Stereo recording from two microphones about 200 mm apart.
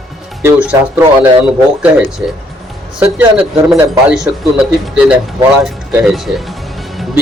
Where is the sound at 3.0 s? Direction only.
5° right (ahead or behind).